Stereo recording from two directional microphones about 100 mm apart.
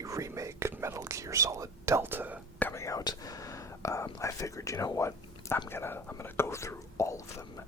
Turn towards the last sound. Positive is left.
turn(degrees=30)  # may be behind; listen again after turning